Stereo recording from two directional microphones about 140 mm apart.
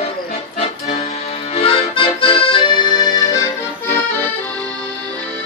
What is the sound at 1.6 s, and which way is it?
Accordion, 40° left (ahead or behind).